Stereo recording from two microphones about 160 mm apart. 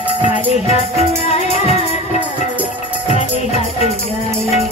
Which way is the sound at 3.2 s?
45° left (ahead or behind).